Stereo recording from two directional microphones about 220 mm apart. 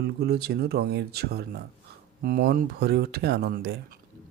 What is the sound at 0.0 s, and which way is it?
Speech, 45° right (ahead or behind).